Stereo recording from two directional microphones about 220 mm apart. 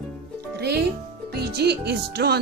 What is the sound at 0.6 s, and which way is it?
Music, 45° right (ahead or behind).